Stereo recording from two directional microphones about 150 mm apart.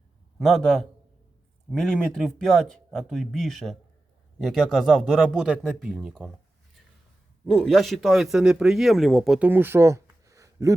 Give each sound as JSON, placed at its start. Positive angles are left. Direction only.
{"t": 0.3, "sound": "speech", "side_deg": 0}
{"t": 7.5, "sound": "speech", "side_deg": 0}
{"t": 9.5, "sound": "a sound", "side_deg": -15}